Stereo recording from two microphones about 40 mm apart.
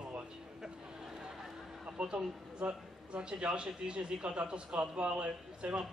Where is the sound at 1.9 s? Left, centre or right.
Right.